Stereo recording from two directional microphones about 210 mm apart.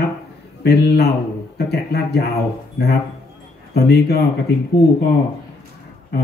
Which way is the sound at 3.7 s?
50° left (ahead or behind).